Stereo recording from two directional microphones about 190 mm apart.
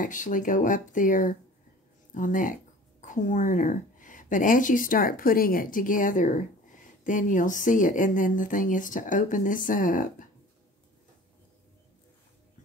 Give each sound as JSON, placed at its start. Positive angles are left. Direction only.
{"t": 0.0, "sound": "speech", "side_deg": 45}